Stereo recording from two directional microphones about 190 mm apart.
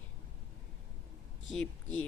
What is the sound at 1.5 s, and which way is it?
Speech, 5° left (ahead or behind).